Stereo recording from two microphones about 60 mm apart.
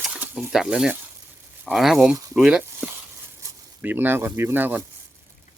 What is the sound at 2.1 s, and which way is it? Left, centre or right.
Speech, right.